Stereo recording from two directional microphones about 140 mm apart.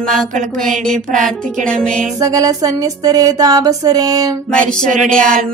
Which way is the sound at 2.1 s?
25° right (ahead or behind).